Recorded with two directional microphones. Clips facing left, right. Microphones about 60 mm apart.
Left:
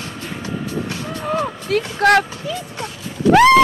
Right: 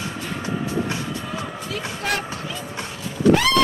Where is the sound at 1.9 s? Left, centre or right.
Left.